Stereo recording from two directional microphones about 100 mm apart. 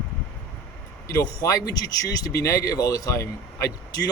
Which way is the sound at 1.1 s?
35° left (ahead or behind).